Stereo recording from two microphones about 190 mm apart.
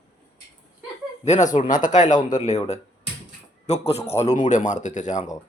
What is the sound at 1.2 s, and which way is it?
Speech, 40° left (ahead or behind).